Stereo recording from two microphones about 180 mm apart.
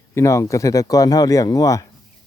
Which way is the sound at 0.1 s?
15° left (ahead or behind).